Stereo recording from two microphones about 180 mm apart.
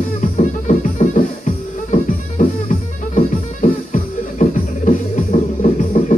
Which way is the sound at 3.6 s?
45° left (ahead or behind).